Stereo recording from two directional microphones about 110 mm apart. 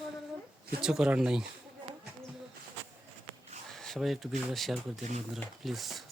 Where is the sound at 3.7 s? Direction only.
5° left (ahead or behind).